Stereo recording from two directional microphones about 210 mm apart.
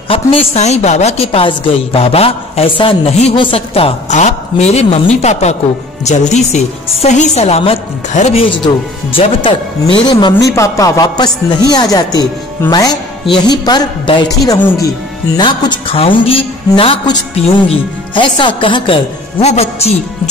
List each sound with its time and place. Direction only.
0.1 s a woman's voice: 25° left (ahead or behind)